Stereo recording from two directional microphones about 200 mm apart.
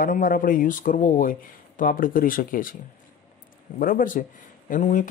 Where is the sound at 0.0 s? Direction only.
45° left (ahead or behind).